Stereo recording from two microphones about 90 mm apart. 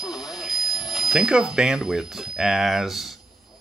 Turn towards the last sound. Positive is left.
turn(degrees=-5)  # may be behind; listen again after turning